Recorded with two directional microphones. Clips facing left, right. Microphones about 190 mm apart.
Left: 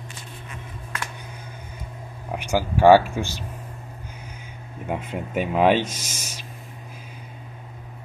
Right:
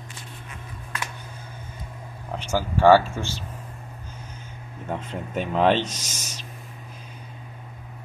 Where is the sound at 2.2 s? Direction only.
10° left (ahead or behind).